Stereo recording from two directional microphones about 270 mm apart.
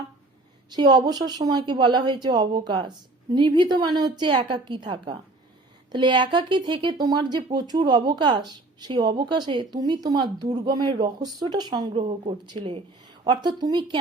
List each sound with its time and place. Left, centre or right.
0.7 s speech: centre